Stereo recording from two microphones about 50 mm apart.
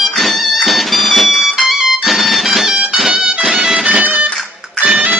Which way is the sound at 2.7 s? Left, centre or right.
Centre.